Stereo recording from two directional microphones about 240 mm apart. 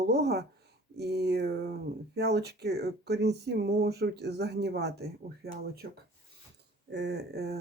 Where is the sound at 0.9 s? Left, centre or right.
Right.